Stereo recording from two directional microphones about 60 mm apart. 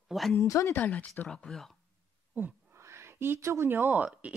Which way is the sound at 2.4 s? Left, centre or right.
Right.